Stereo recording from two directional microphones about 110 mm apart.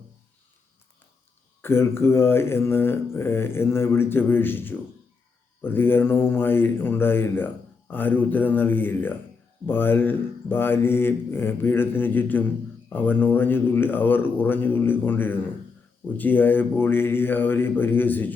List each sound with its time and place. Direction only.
1.6 s speech: 20° left (ahead or behind)